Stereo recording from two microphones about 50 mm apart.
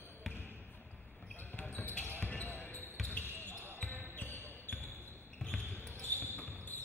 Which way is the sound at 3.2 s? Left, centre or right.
Right.